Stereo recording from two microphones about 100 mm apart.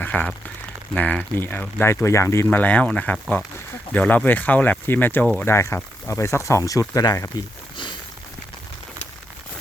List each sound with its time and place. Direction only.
0.0 s a sound: 15° left (ahead or behind)
0.9 s speech: 15° left (ahead or behind)
2.6 s speech: 15° left (ahead or behind); by 7.4 s 40° left (ahead or behind)